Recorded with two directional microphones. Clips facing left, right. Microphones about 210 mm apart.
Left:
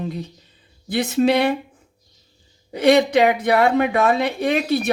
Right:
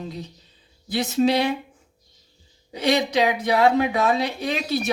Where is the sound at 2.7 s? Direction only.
55° left (ahead or behind).